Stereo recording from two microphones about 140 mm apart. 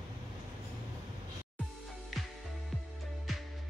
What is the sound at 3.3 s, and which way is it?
Music, centre (ahead or behind).